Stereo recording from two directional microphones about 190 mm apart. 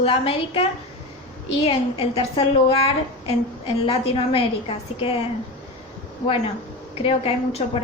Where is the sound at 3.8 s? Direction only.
30° left (ahead or behind).